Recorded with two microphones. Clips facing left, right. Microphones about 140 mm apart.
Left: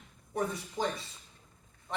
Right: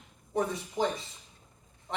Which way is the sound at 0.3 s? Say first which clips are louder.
Right 4 dB; 20° right (ahead or behind).